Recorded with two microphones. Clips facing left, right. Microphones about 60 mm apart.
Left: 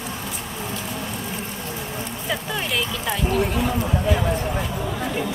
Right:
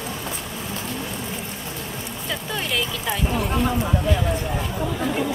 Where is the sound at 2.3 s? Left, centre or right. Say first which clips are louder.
Left 1 dB; centre.